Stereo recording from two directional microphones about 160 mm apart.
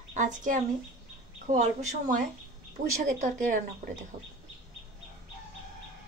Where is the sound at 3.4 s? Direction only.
55° right (ahead or behind).